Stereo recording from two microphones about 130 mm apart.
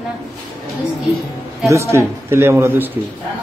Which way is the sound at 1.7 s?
20° right (ahead or behind).